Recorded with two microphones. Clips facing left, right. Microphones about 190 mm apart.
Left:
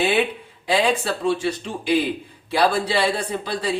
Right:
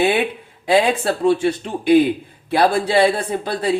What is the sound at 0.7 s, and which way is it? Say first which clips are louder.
A woman's voice: right 4 dB; 55° right (ahead or behind).